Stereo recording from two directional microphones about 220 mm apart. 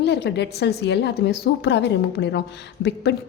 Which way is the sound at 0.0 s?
50° left (ahead or behind).